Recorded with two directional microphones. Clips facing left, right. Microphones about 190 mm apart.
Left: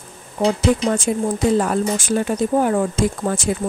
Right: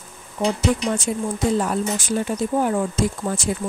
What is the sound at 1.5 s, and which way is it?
Speech, 55° left (ahead or behind).